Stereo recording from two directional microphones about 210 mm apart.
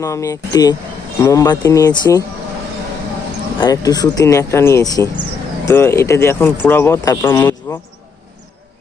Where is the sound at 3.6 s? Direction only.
20° left (ahead or behind).